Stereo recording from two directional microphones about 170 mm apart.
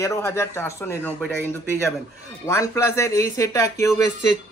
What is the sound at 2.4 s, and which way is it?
A man's voice, 15° left (ahead or behind).